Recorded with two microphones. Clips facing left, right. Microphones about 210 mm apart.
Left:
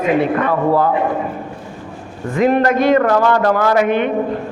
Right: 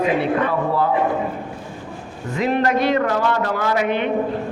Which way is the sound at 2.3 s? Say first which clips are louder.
Left 5 dB; 50° left (ahead or behind).